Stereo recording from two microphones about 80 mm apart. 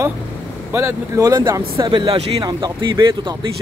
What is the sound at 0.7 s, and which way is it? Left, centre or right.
Speech, right.